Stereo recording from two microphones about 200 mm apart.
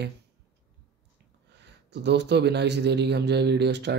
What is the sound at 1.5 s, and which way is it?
A man's voice, 60° right (ahead or behind).